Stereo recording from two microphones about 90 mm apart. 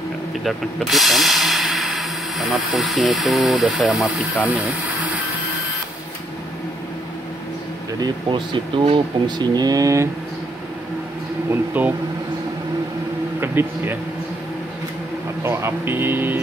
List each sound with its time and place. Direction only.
0.4 s speech: centre (ahead or behind)
4.5 s speech: 15° right (ahead or behind)
8.3 s speech: 65° right (ahead or behind)
9.6 s speech: 45° right (ahead or behind)
11.7 s speech: 20° right (ahead or behind)
13.4 s speech: 25° right (ahead or behind)
15.4 s speech: 30° right (ahead or behind)